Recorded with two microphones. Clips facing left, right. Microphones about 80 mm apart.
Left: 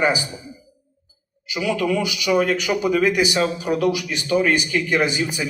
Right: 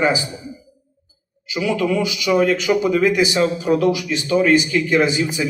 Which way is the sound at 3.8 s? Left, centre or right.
Right.